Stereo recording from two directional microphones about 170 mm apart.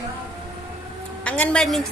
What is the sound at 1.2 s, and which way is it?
Speech, 5° left (ahead or behind).